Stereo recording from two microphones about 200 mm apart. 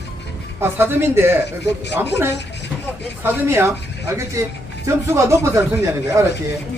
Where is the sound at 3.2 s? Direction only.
10° right (ahead or behind).